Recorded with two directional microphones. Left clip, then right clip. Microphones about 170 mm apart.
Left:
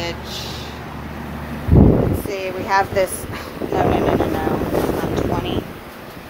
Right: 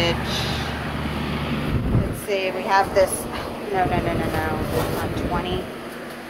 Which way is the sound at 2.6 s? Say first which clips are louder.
Left 1 dB; 50° left (ahead or behind).